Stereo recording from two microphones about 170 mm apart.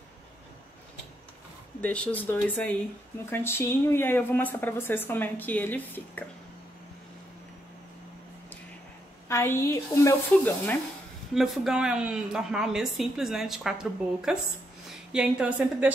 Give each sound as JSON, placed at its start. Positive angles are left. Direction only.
{"t": 1.8, "sound": "a woman's voice", "side_deg": 10}
{"t": 9.3, "sound": "a woman's voice", "side_deg": 15}
{"t": 11.3, "sound": "a woman's voice", "side_deg": 0}